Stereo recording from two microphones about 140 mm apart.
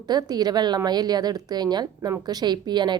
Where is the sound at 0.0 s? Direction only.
30° right (ahead or behind).